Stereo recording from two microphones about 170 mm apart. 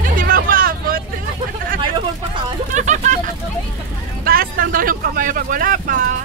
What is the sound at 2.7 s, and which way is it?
Speech, 45° right (ahead or behind).